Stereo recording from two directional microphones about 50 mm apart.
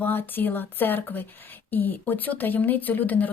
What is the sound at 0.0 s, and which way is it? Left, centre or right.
A woman's voice, left.